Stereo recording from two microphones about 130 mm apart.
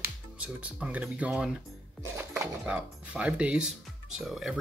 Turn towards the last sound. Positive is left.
turn(degrees=-5)  # may be behind; listen again after turning